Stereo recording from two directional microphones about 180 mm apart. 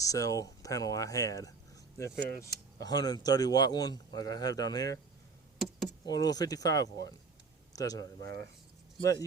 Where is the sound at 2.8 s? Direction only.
20° left (ahead or behind).